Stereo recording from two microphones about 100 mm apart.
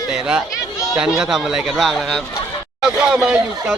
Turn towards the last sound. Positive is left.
turn(degrees=-10)  # may be behind; listen again after turning